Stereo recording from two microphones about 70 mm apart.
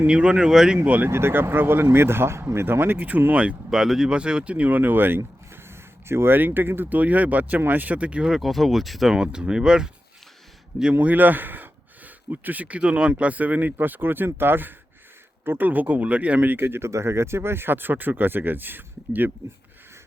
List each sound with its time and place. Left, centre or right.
0.1 s speech: centre
0.9 s speech: right
1.1 s speech: right; by 8.3 s centre
8.3 s speech: centre
10.9 s speech: right